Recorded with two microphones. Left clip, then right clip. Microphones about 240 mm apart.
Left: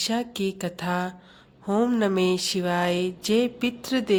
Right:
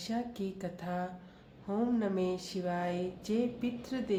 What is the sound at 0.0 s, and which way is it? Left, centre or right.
A woman's voice, left.